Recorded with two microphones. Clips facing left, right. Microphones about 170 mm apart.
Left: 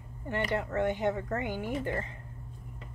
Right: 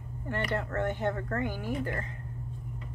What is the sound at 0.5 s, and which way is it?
Speech, 15° left (ahead or behind).